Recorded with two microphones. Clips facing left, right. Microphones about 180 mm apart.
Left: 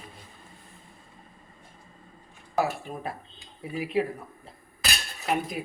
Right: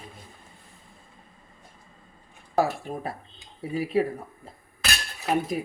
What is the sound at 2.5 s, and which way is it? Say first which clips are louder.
Speech: right 3 dB; 35° right (ahead or behind).